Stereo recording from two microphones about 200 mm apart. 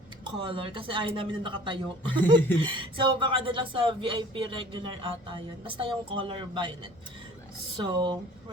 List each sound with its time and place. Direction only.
0.3 s speech: 25° right (ahead or behind)
7.9 s speech: 25° right (ahead or behind)